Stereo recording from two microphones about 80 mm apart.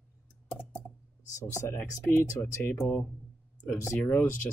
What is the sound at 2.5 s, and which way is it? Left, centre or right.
Speech, left.